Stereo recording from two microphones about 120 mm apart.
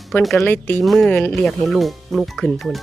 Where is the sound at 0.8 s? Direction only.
Centre (ahead or behind).